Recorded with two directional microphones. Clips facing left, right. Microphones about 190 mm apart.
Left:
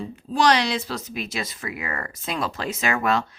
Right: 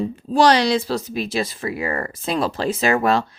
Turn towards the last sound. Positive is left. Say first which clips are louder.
# right 5 dB
turn(degrees=-35)  # may be behind; listen again after turning